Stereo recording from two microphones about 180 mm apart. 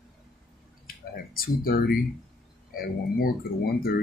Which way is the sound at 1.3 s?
55° left (ahead or behind).